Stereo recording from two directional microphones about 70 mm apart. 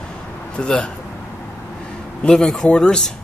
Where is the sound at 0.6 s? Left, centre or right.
Centre.